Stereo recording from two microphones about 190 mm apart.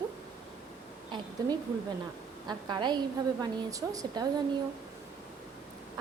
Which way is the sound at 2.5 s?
25° right (ahead or behind).